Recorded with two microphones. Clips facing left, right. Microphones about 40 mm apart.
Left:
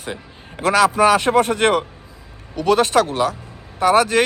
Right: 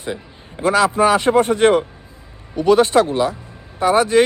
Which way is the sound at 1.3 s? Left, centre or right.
Left.